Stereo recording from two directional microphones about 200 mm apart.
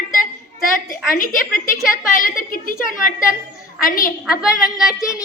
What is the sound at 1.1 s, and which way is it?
A woman's voice, 45° left (ahead or behind).